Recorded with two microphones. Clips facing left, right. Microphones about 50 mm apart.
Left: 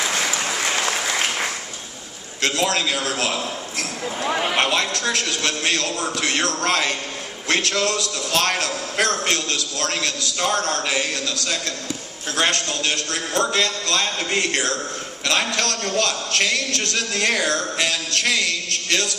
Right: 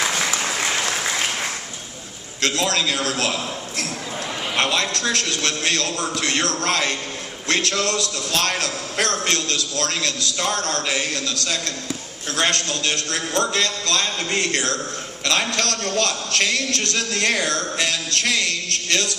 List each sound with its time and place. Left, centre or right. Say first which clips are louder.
0.1 s applause: even; centre
2.4 s a man's voice: even; left
4.3 s speech: left 8 dB; left
4.5 s a man's voice: left 1 dB; left